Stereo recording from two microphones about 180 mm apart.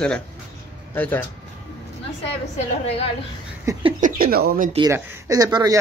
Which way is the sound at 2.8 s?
35° left (ahead or behind).